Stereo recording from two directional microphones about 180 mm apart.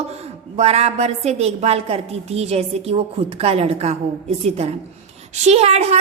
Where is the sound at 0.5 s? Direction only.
35° right (ahead or behind).